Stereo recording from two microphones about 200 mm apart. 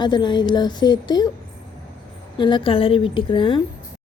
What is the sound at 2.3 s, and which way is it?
A woman's voice, 25° left (ahead or behind).